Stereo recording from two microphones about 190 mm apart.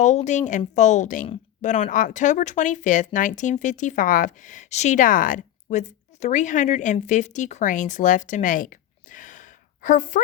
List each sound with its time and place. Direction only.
0.0 s a woman's voice: 40° left (ahead or behind)
9.1 s gasp: 40° left (ahead or behind)
9.8 s a woman's voice: 45° left (ahead or behind)